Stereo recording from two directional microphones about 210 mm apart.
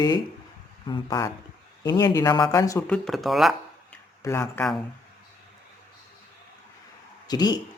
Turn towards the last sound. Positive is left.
turn(degrees=20)  # may be behind; listen again after turning